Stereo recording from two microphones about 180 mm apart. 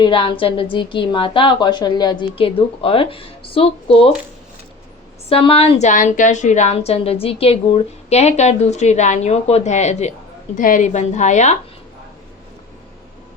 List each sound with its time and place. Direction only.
0.0 s a woman's voice: 30° left (ahead or behind)
5.3 s a woman's voice: 30° left (ahead or behind)
5.9 s a woman's voice: 45° left (ahead or behind)